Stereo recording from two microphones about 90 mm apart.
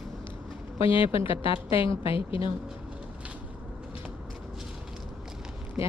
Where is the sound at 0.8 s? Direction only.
80° left.